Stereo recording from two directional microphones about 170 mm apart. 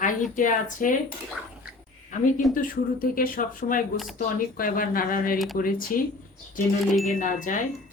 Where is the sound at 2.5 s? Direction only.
55° left (ahead or behind).